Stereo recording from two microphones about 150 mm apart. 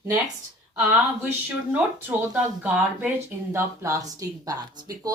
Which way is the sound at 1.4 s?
10° right (ahead or behind).